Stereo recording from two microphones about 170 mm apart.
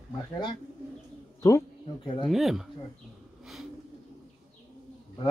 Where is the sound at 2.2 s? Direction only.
Centre (ahead or behind).